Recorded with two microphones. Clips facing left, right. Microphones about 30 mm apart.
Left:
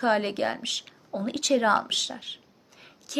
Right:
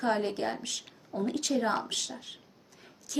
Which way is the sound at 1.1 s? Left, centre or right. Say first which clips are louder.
Left 1 dB; left.